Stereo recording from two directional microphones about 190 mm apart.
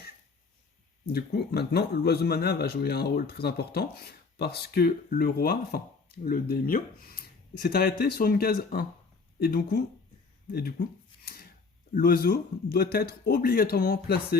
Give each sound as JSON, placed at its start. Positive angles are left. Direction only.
{"t": 1.0, "sound": "speech", "side_deg": 55}
{"t": 11.3, "sound": "a sound", "side_deg": 55}
{"t": 11.9, "sound": "speech", "side_deg": 50}